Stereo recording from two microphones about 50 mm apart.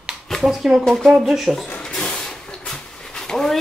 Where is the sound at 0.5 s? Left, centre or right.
Centre.